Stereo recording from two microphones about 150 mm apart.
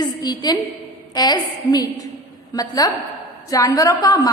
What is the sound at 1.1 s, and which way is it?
A woman's voice, 25° left (ahead or behind).